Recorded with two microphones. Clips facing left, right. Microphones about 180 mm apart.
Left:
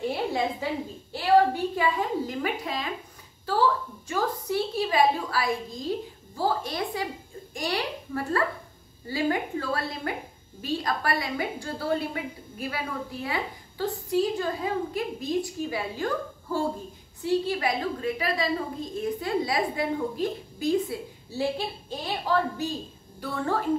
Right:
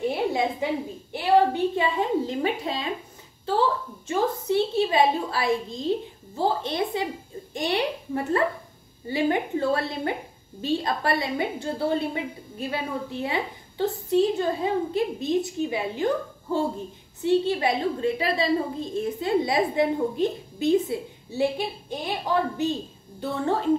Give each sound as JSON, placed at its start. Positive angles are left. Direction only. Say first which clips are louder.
{"t": 0.6, "sound": "a woman's voice", "louder": "right 4 dB", "side_deg": -20}
{"t": 1.1, "sound": "a sound", "louder": "right 1 dB", "side_deg": -20}
{"t": 9.0, "sound": "a woman's voice", "louder": "right 3 dB", "side_deg": -25}